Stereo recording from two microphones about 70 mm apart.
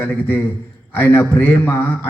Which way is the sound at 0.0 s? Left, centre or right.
Left.